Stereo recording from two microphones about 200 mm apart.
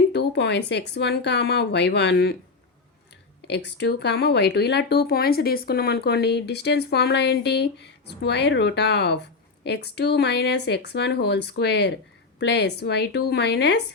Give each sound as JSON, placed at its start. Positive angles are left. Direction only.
{"t": 0.1, "sound": "speech", "side_deg": 55}
{"t": 3.4, "sound": "speech", "side_deg": 60}